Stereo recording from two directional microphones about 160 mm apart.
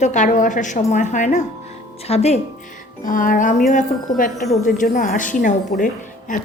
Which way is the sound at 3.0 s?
55° left (ahead or behind).